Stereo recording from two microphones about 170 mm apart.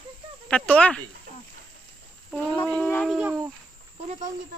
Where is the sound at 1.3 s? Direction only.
55° right (ahead or behind).